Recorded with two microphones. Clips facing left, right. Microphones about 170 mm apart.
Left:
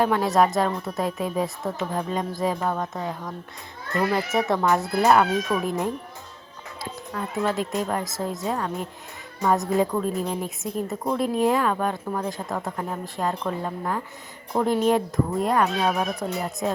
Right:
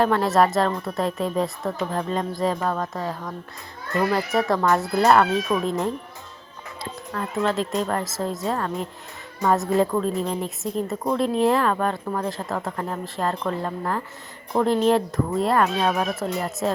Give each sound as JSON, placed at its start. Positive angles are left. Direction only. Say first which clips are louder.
{"t": 0.0, "sound": "a woman's voice", "louder": "right 1 dB", "side_deg": 5}
{"t": 2.6, "sound": "speech", "louder": "right 1 dB", "side_deg": 10}
{"t": 4.4, "sound": "speech", "louder": "right 1 dB", "side_deg": 20}
{"t": 4.6, "sound": "speech", "louder": "right 1 dB", "side_deg": 5}
{"t": 7.1, "sound": "a woman's voice", "louder": "right 2 dB", "side_deg": 5}